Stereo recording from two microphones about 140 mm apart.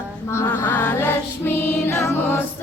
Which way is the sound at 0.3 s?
15° left (ahead or behind).